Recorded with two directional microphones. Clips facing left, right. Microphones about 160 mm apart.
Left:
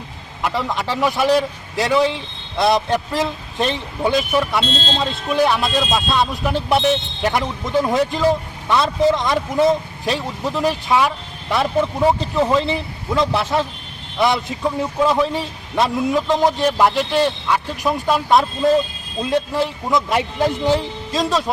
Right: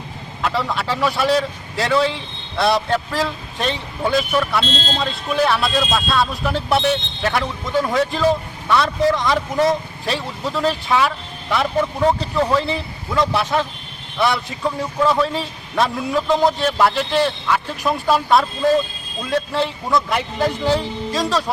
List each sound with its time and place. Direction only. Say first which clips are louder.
0.4 s a man's voice: even; 15° left (ahead or behind)